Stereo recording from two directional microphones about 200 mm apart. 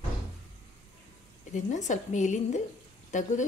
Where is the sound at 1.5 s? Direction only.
40° left (ahead or behind).